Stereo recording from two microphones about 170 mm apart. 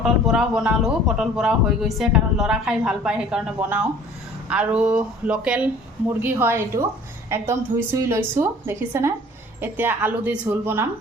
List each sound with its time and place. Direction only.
0.0 s speech: 5° right (ahead or behind)